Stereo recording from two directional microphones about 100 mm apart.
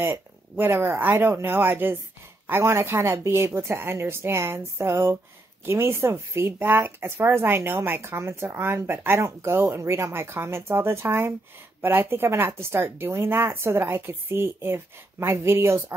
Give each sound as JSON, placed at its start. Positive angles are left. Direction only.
{"t": 0.0, "sound": "speech", "side_deg": -25}